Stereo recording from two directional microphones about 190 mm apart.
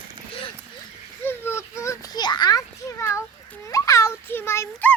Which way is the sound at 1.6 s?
15° left (ahead or behind).